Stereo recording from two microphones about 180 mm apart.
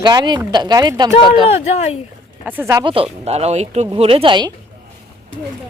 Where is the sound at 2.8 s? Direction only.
30° right (ahead or behind).